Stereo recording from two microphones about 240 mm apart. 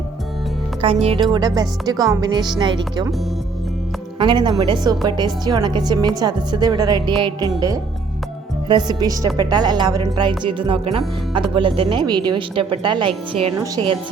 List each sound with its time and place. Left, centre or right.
0.8 s a woman's voice: right
4.2 s a woman's voice: centre
8.6 s a woman's voice: centre